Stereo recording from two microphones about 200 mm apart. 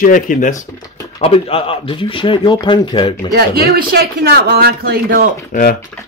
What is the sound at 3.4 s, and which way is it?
Speech, 50° right (ahead or behind).